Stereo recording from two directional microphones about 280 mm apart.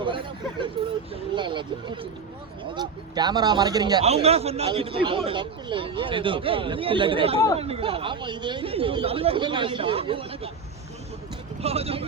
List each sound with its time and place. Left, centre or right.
1.1 s a man's voice: centre
11.6 s speech: right